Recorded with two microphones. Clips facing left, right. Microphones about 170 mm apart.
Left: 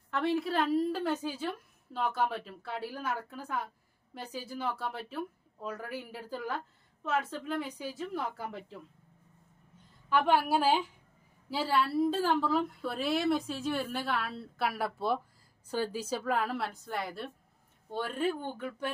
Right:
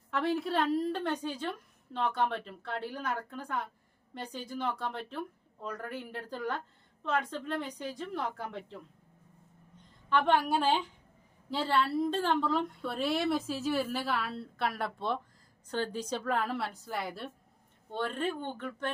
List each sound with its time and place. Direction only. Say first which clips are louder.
0.1 s a woman's voice: even; centre (ahead or behind)
10.1 s a woman's voice: even; 10° left (ahead or behind)